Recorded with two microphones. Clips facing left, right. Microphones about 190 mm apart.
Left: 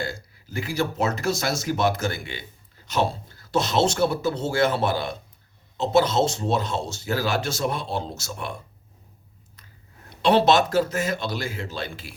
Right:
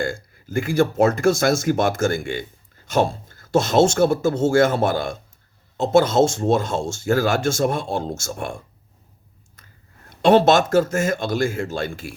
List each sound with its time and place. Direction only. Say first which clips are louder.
0.0 s speech: right 6 dB; 50° right (ahead or behind)
9.6 s a sound: right 1 dB; 45° right (ahead or behind)
10.2 s speech: right 4 dB; 50° right (ahead or behind)